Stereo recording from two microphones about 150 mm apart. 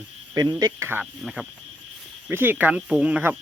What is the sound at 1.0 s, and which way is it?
Speech, 5° right (ahead or behind).